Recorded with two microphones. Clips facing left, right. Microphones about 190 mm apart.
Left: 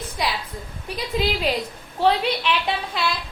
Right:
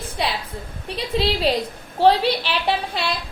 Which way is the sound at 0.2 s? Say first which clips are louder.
Right 1 dB; 30° right (ahead or behind).